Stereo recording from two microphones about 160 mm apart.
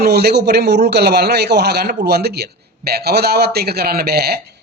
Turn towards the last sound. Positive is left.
turn(degrees=-80)